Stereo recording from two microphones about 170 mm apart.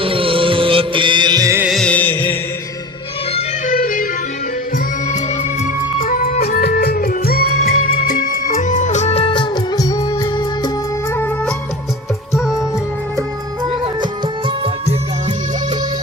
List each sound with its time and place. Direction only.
0.0 s music: 30° right (ahead or behind)
1.6 s music: 5° left (ahead or behind)
3.7 s music: 55° left (ahead or behind)
5.0 s music: 45° left (ahead or behind); by 10.7 s 25° left (ahead or behind)
11.1 s music: 10° left (ahead or behind)
12.3 s music: centre (ahead or behind)
14.0 s music: 30° right (ahead or behind)